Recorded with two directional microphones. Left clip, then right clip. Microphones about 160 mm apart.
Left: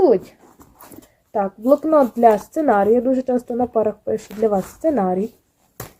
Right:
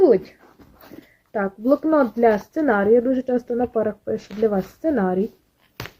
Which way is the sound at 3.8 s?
15° left (ahead or behind).